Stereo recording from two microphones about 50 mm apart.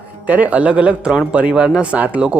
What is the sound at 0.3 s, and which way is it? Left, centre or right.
Speech, right.